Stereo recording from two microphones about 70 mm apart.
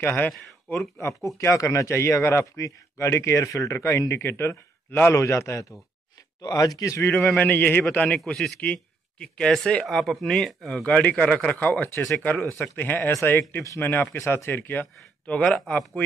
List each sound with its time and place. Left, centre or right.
0.0 s speech: left
1.0 s speech: left
6.4 s speech: left
7.3 s speech: left
9.2 s speech: centre
10.7 s speech: centre
13.1 s speech: left
13.7 s speech: left
15.2 s speech: centre